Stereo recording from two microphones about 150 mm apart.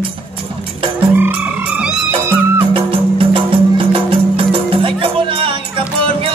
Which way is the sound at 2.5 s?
35° right (ahead or behind).